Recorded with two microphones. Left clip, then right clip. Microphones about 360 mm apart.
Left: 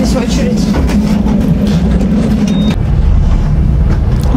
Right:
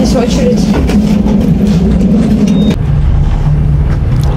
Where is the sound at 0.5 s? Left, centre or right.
Centre.